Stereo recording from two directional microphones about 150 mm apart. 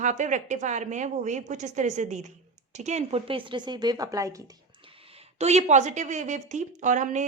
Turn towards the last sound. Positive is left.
turn(degrees=-55)  # may be behind; listen again after turning